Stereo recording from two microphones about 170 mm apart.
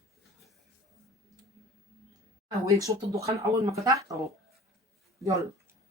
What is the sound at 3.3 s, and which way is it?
Speech, 20° right (ahead or behind).